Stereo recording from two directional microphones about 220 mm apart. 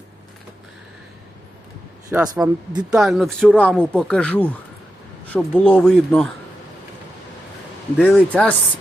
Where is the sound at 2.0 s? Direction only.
10° right (ahead or behind).